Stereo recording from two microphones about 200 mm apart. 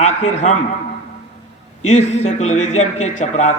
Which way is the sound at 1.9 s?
35° left (ahead or behind).